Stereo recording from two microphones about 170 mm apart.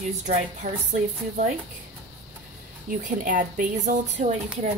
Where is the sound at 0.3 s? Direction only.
45° right (ahead or behind).